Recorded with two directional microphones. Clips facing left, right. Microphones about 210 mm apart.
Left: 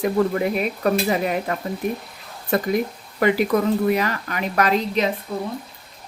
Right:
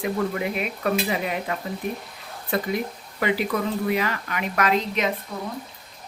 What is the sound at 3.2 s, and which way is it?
Speech, 45° left (ahead or behind).